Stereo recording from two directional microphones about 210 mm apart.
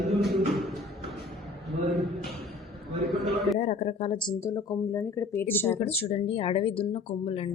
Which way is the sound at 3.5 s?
30° left (ahead or behind).